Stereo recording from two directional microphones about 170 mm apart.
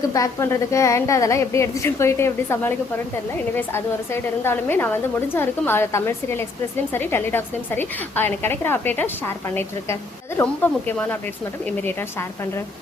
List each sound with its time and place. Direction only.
0.1 s a woman's voice: 20° left (ahead or behind)